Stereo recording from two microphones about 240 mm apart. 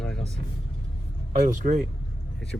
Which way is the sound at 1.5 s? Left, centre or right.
Right.